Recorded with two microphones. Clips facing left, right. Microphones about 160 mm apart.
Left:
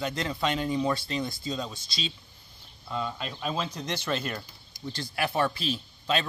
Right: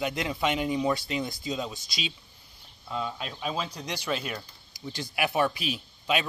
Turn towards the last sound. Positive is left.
turn(degrees=-10)  # may be behind; listen again after turning